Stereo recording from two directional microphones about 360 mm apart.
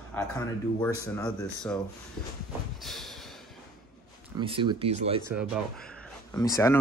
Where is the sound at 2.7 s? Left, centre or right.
Centre.